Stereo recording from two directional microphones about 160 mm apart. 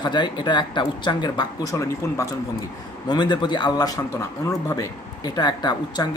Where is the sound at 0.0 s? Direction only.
30° left (ahead or behind).